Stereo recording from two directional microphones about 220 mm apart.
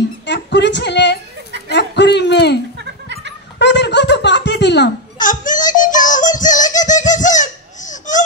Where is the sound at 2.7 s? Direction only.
50° right (ahead or behind).